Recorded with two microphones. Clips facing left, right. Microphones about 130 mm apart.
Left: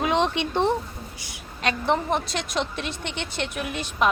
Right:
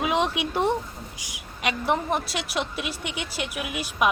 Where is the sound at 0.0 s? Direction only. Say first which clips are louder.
Left 2 dB; 5° right (ahead or behind).